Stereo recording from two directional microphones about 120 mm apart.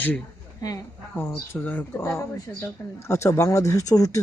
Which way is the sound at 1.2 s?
15° left (ahead or behind).